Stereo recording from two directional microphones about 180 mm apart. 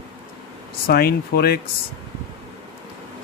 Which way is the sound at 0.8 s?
60° left (ahead or behind).